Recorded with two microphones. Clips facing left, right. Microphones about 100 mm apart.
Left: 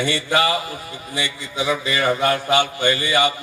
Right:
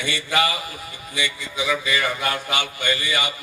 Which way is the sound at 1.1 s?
30° left (ahead or behind).